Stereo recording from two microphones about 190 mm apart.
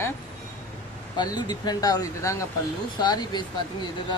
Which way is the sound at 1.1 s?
20° left (ahead or behind).